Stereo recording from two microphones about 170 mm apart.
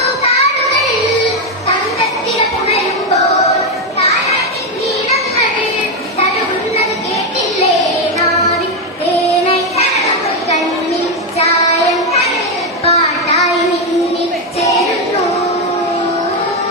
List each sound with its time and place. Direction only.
3.9 s children playing: 40° left (ahead or behind)
9.5 s child singing: 40° left (ahead or behind)
12.8 s child singing: 40° left (ahead or behind)